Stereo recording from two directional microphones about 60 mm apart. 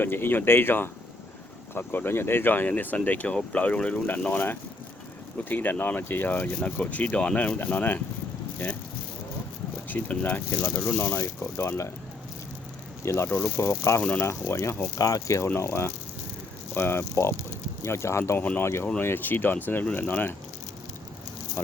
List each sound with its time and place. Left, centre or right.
0.0 s speech: left
5.5 s speech: left
10.1 s speech: left
11.2 s speech: left
13.0 s speech: left
13.3 s speech: left
14.9 s speech: left
15.6 s speech: left
18.9 s speech: left